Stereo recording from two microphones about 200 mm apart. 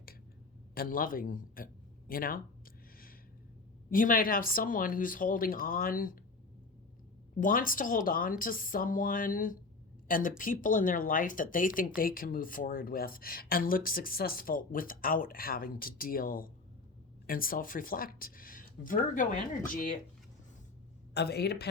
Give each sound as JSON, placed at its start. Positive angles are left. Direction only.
{"t": 0.7, "sound": "a man's voice", "side_deg": 45}
{"t": 3.8, "sound": "speech", "side_deg": 45}
{"t": 7.3, "sound": "speech", "side_deg": 45}
{"t": 21.1, "sound": "a woman's voice", "side_deg": 55}